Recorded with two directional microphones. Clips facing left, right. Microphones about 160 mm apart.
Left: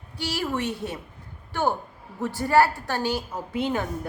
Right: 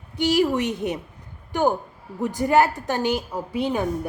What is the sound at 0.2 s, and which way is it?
A woman's voice, 20° right (ahead or behind).